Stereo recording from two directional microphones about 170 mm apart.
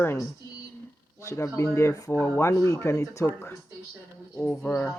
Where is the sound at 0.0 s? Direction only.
15° left (ahead or behind).